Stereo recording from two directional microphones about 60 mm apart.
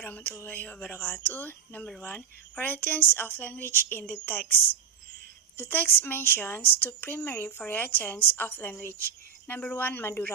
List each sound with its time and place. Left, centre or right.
0.0 s speech: left